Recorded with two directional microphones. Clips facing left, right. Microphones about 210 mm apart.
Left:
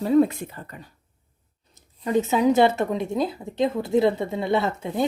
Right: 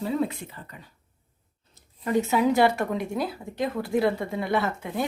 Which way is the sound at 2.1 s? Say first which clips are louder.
Left 2 dB; 20° left (ahead or behind).